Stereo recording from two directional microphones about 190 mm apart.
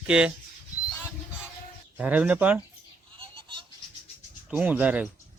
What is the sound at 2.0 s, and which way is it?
Speech, 10° right (ahead or behind).